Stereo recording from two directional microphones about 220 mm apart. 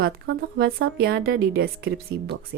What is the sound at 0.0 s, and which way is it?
Speech, 45° right (ahead or behind).